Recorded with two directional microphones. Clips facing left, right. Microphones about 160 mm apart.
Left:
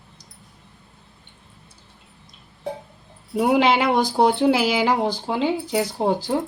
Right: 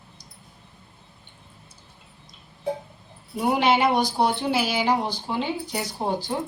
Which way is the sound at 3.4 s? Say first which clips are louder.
Left 3 dB; 90° left.